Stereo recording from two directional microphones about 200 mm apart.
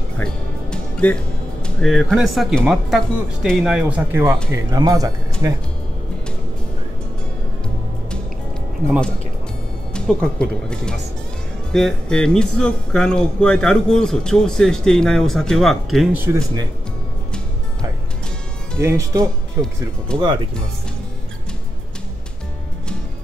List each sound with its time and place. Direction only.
0.2 s speech: 5° left (ahead or behind); by 5.1 s 20° right (ahead or behind)
8.8 s speech: 10° left (ahead or behind)
18.8 s speech: 15° right (ahead or behind)
20.1 s speech: 5° left (ahead or behind)